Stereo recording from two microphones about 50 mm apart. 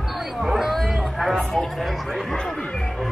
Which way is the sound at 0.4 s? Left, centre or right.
Centre.